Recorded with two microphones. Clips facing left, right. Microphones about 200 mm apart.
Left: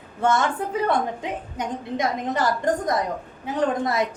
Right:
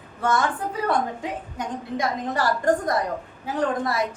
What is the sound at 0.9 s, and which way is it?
A woman's voice, 20° left (ahead or behind).